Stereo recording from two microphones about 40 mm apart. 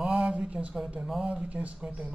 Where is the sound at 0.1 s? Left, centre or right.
Right.